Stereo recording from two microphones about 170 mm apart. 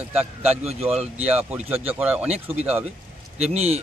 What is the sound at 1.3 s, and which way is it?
Speech, 10° right (ahead or behind).